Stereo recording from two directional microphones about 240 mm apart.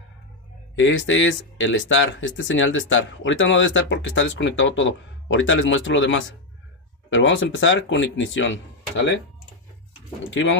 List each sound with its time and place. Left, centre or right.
0.7 s speech: left
10.3 s speech: left